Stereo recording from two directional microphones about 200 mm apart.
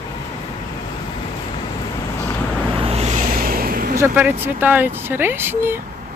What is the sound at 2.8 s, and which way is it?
Vehicle, 30° right (ahead or behind).